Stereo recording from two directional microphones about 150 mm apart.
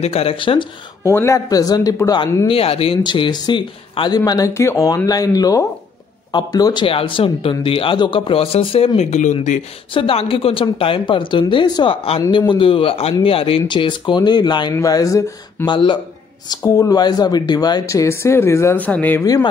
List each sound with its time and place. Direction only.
0.0 s speech: 40° left (ahead or behind)
1.0 s speech: 20° left (ahead or behind)
2.4 s speech: 40° left (ahead or behind)
4.2 s speech: 20° left (ahead or behind); by 9.6 s 55° left (ahead or behind)
9.9 s speech: 35° left (ahead or behind); by 15.7 s 20° left (ahead or behind)
15.7 s speech: 30° left (ahead or behind); by 19.2 s 10° left (ahead or behind)